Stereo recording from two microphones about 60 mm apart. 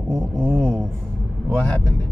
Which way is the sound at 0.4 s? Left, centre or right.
Right.